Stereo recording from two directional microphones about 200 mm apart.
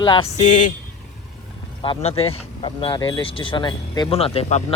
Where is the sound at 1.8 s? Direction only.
30° left (ahead or behind).